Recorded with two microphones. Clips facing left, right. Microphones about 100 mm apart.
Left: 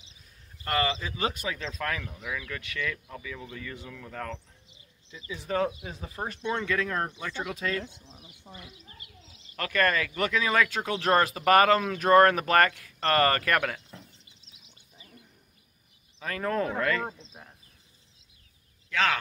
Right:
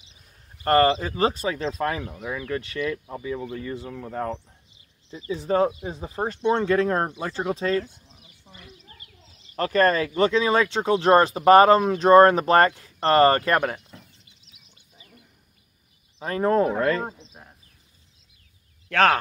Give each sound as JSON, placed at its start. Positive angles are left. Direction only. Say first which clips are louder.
{"t": 0.7, "sound": "speech", "louder": "right 10 dB", "side_deg": -45}
{"t": 7.8, "sound": "a sound", "louder": "left 2 dB", "side_deg": 25}
{"t": 9.6, "sound": "speech", "louder": "right 6 dB", "side_deg": -30}
{"t": 13.8, "sound": "a sound", "louder": "even", "side_deg": 30}
{"t": 16.2, "sound": "speech", "louder": "right 8 dB", "side_deg": -30}
{"t": 17.2, "sound": "speech", "louder": "right 1 dB", "side_deg": -10}
{"t": 18.9, "sound": "speech", "louder": "right 8 dB", "side_deg": -50}